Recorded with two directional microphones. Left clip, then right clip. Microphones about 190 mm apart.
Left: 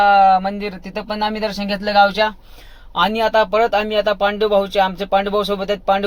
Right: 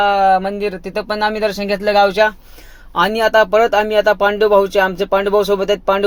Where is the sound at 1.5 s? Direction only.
15° right (ahead or behind).